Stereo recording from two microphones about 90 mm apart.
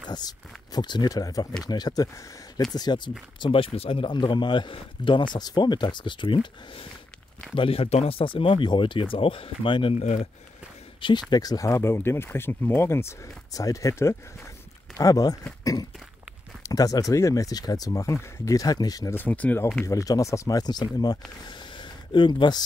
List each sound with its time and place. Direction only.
0.7 s speech: 50° left (ahead or behind); by 9.9 s 75° left (ahead or behind)
11.0 s speech: 60° left (ahead or behind); by 13.1 s 30° left (ahead or behind)
13.5 s speech: 40° left (ahead or behind)
15.6 s a sound: 45° left (ahead or behind)
16.6 s speech: 40° left (ahead or behind)
19.1 s speech: 20° left (ahead or behind)
19.8 s speech: 35° left (ahead or behind); by 22.6 s 60° left (ahead or behind)